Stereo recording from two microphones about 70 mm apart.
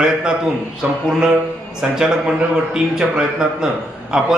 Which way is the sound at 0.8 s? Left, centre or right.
Right.